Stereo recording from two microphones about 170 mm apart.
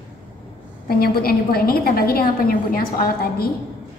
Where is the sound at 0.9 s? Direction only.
60° left (ahead or behind).